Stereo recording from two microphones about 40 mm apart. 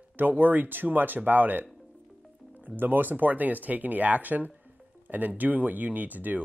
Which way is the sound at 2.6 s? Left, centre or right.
Right.